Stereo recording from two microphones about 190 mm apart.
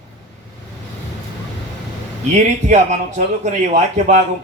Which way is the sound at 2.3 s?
40° right (ahead or behind).